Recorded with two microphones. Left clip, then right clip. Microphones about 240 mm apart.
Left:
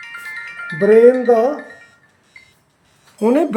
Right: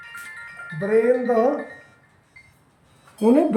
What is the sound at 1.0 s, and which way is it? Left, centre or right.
Speech, left.